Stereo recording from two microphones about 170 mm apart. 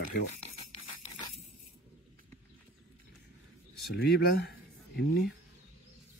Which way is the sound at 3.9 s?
65° left (ahead or behind).